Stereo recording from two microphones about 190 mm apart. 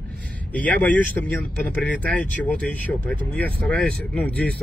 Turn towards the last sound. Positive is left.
turn(degrees=5)  # may be behind; listen again after turning